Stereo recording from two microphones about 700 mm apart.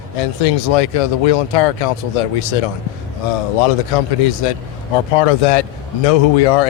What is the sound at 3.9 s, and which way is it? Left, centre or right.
A man's voice, left.